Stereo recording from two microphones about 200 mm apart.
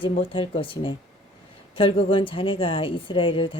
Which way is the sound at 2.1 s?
25° left (ahead or behind).